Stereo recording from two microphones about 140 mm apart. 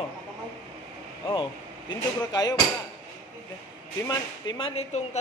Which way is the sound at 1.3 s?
35° left (ahead or behind).